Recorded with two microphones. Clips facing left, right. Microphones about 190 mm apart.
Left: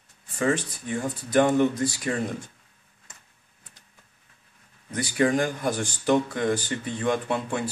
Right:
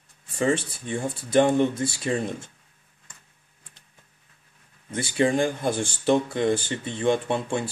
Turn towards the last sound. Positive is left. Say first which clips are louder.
# right 2 dB
turn(degrees=-25)  # may be behind; listen again after turning